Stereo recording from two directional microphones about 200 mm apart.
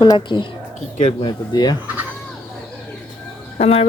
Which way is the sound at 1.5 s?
20° left (ahead or behind).